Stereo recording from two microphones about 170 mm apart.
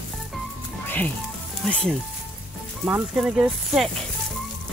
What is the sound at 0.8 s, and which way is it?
Music, 10° left (ahead or behind).